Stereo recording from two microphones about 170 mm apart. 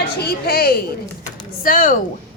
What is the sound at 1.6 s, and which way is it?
Speech, 55° left (ahead or behind).